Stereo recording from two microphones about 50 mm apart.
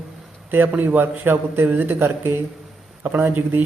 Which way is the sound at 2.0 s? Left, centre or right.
Right.